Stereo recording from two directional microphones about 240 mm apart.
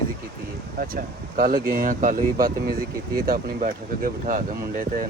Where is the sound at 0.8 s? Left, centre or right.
Right.